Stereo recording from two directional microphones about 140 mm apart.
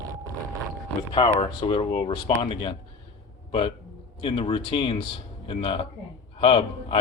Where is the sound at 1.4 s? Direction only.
40° left (ahead or behind).